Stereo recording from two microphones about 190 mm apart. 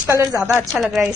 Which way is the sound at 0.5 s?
Centre (ahead or behind).